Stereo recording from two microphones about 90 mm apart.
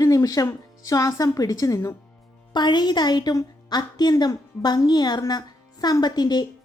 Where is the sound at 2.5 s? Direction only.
55° left (ahead or behind).